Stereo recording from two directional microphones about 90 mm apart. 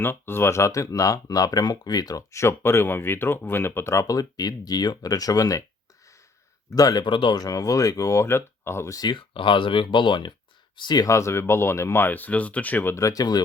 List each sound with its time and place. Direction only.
0.0 s speech: 25° left (ahead or behind); by 5.6 s 40° left (ahead or behind)
6.7 s speech: 45° left (ahead or behind); by 7.3 s 65° left (ahead or behind)
7.3 s speech: 45° left (ahead or behind)
9.1 s speech: 70° left (ahead or behind); by 11.1 s 50° left (ahead or behind)
11.1 s speech: 30° left (ahead or behind)
13.0 s speech: 40° left (ahead or behind)